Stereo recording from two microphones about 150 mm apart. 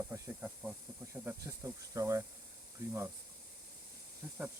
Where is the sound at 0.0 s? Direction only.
10° right (ahead or behind).